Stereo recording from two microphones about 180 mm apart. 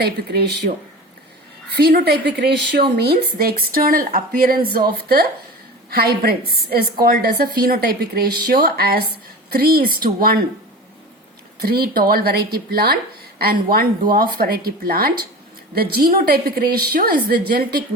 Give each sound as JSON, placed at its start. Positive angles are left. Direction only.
{"t": 0.0, "sound": "a woman's voice", "side_deg": -65}
{"t": 1.7, "sound": "a woman's voice", "side_deg": -60}
{"t": 11.6, "sound": "a woman's voice", "side_deg": -60}